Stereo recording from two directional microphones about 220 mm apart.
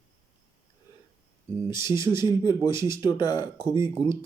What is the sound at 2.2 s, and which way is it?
Speech, 20° left (ahead or behind).